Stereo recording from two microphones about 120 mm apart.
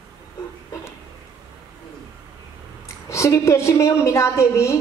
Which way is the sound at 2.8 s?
25° left (ahead or behind).